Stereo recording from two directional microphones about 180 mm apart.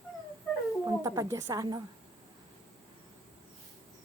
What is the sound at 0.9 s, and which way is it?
Speech, 20° right (ahead or behind).